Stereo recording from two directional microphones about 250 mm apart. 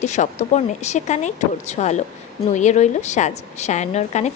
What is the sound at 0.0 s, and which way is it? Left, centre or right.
A woman's voice, left.